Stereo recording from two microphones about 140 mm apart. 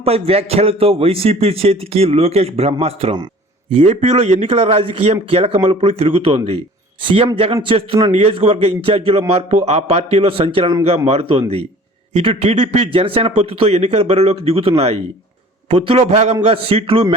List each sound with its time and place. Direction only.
0.0 s a man's voice: 45° right (ahead or behind)